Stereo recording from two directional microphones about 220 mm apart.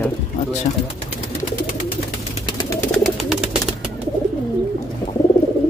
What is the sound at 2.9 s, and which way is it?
Bird, centre (ahead or behind).